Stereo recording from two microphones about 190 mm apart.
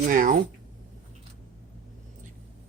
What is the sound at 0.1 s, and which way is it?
Cutlery, 45° right (ahead or behind).